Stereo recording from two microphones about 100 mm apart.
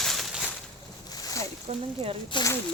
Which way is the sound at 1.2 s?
35° left (ahead or behind).